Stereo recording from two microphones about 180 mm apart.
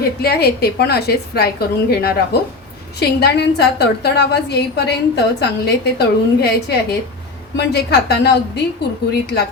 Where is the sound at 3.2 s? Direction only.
65° left (ahead or behind).